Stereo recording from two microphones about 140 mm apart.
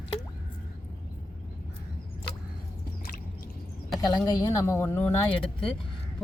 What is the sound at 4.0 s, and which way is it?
Speech, 25° left (ahead or behind).